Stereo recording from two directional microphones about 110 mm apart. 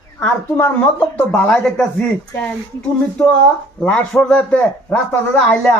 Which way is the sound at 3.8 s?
10° left (ahead or behind).